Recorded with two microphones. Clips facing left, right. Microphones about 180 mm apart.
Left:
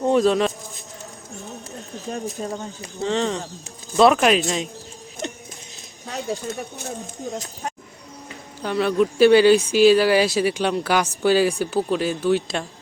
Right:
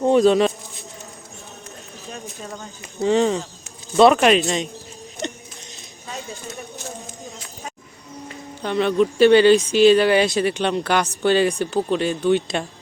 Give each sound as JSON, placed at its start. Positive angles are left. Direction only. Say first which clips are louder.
{"t": 0.0, "sound": "speech", "louder": "right 3 dB", "side_deg": 0}
{"t": 2.0, "sound": "speech", "louder": "left 7 dB", "side_deg": 35}
{"t": 3.0, "sound": "speech", "louder": "right 5 dB", "side_deg": -15}
{"t": 3.9, "sound": "speech", "louder": "right 2 dB", "side_deg": 0}
{"t": 5.2, "sound": "a sound", "louder": "right 1 dB", "side_deg": 5}
{"t": 6.1, "sound": "a sound", "louder": "left 5 dB", "side_deg": 60}
{"t": 8.6, "sound": "speech", "louder": "right 1 dB", "side_deg": 5}